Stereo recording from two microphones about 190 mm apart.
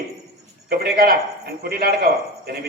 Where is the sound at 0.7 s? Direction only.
55° right (ahead or behind).